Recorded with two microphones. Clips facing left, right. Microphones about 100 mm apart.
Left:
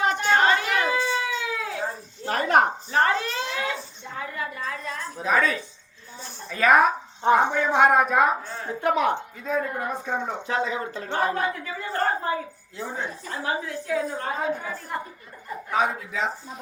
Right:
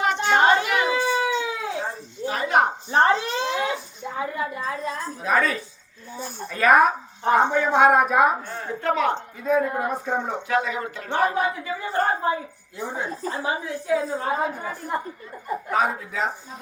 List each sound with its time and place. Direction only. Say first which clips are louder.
0.2 s a sound: right 5 dB; 20° right (ahead or behind)
1.2 s howl: right 4 dB; 25° right (ahead or behind)
2.2 s a sound: even; 45° left (ahead or behind)
2.9 s a sound: right 4 dB; 30° right (ahead or behind)
4.9 s a sound: right 4 dB; 35° right (ahead or behind)
5.2 s a woman's voice: even; centre (ahead or behind)
7.3 s speech: even; 15° left (ahead or behind)
7.5 s a woman's voice: right 2 dB; 5° right (ahead or behind)
8.6 s speech: even; 15° left (ahead or behind)
9.4 s a woman's voice: right 9 dB; 5° right (ahead or behind)
10.5 s speech: right 2 dB; 25° left (ahead or behind)
11.3 s speech: right 3 dB; 15° right (ahead or behind)
15.7 s a woman's voice: even; centre (ahead or behind)